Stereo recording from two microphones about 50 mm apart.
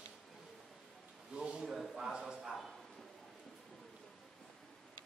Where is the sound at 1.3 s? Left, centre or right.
Centre.